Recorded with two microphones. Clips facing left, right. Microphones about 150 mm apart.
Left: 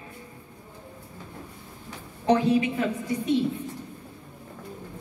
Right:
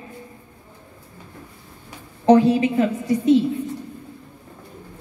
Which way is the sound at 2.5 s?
25° right (ahead or behind).